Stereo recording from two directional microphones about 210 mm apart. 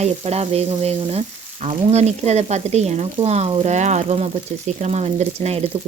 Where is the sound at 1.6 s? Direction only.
30° right (ahead or behind).